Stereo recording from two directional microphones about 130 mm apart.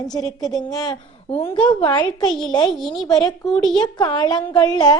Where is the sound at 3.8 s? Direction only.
35° left (ahead or behind).